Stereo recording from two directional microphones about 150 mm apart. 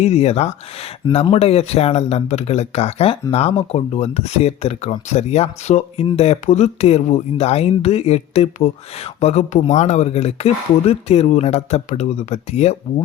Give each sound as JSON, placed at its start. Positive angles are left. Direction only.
{"t": 0.0, "sound": "speech", "side_deg": 45}